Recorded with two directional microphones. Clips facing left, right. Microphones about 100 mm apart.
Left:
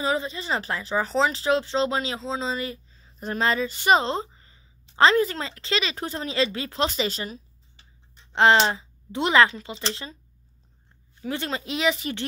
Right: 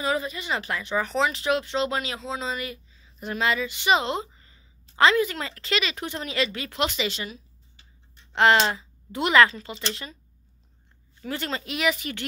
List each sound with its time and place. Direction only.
0.0 s a woman's voice: 25° left (ahead or behind)
8.3 s a woman's voice: 25° left (ahead or behind)
11.1 s speech: 20° left (ahead or behind)